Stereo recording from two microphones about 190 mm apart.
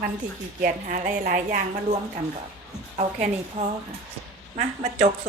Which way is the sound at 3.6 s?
45° right (ahead or behind).